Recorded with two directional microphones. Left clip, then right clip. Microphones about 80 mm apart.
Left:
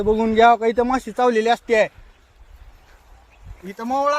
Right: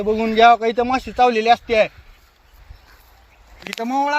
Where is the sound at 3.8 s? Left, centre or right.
Left.